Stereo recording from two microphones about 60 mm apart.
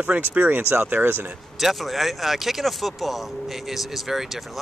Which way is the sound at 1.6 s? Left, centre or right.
Centre.